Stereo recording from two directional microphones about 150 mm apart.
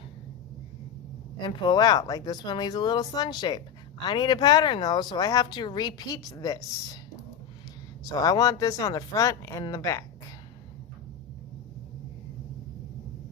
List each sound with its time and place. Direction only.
1.4 s speech: 30° left (ahead or behind)
8.0 s speech: 25° left (ahead or behind)